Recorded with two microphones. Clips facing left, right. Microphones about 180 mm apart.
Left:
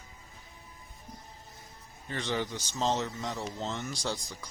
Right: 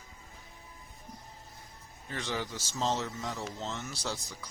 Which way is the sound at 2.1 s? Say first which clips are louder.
Left 3 dB; 5° right (ahead or behind).